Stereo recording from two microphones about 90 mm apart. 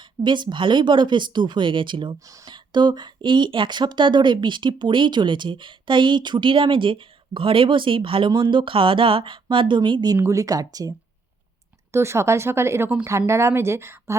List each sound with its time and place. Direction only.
0.3 s speech: 65° right (ahead or behind)
10.2 s speech: 35° right (ahead or behind)
11.9 s speech: 30° right (ahead or behind)